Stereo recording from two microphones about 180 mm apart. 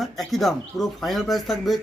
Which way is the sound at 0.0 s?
Centre (ahead or behind).